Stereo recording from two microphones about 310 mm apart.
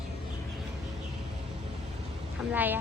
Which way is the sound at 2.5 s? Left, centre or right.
Centre.